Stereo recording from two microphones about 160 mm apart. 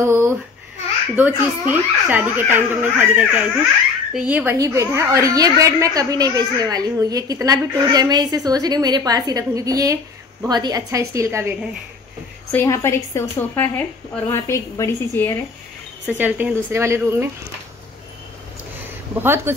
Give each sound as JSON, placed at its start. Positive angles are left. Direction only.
{"t": 0.0, "sound": "babbling", "side_deg": -15}
{"t": 1.1, "sound": "speech", "side_deg": -10}
{"t": 4.6, "sound": "a child's voice", "side_deg": -20}
{"t": 12.5, "sound": "a woman's voice", "side_deg": 15}
{"t": 16.2, "sound": "speech", "side_deg": -10}
{"t": 19.1, "sound": "speech", "side_deg": -15}